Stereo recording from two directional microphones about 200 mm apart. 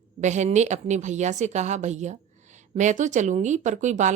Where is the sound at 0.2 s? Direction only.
35° right (ahead or behind).